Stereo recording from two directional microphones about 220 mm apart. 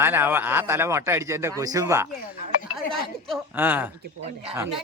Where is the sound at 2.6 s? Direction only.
Centre (ahead or behind).